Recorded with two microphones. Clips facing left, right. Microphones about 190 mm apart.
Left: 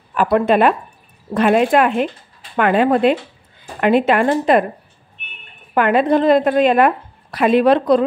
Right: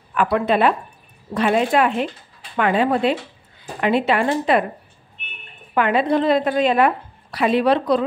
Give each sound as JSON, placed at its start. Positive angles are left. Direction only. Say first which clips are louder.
{"t": 0.1, "sound": "a woman's voice", "louder": "left 4 dB", "side_deg": 40}
{"t": 5.8, "sound": "a woman's voice", "louder": "left 4 dB", "side_deg": 50}